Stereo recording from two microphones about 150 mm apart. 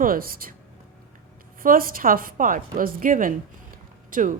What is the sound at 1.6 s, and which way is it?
A woman's voice, 70° right (ahead or behind).